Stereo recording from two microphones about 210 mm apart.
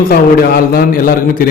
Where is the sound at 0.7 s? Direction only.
45° left (ahead or behind).